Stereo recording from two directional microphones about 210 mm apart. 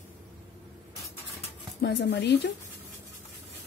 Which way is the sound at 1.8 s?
50° left (ahead or behind).